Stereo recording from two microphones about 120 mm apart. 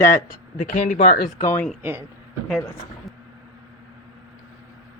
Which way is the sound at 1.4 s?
25° left (ahead or behind).